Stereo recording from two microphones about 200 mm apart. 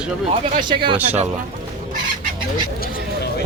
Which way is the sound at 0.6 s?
25° right (ahead or behind).